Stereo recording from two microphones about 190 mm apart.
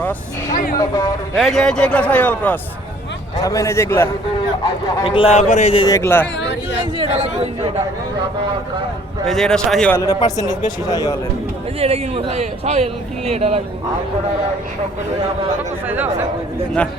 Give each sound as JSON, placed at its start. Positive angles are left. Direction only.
{"t": 0.5, "sound": "a sound", "side_deg": 50}
{"t": 0.8, "sound": "a man's voice", "side_deg": 20}
{"t": 1.4, "sound": "a man's voice", "side_deg": 0}
{"t": 4.6, "sound": "a man's voice", "side_deg": 25}
{"t": 5.9, "sound": "a man's voice", "side_deg": 10}
{"t": 7.0, "sound": "speech", "side_deg": -30}
{"t": 9.2, "sound": "speech", "side_deg": 0}
{"t": 10.0, "sound": "a man's voice", "side_deg": 20}
{"t": 11.8, "sound": "speech", "side_deg": -30}